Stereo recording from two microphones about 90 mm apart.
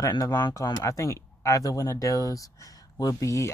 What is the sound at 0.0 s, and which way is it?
Speech, 45° left (ahead or behind).